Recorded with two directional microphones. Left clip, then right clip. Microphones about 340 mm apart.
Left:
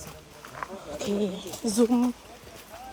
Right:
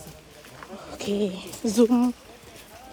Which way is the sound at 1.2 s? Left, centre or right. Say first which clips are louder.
Right 2 dB; centre.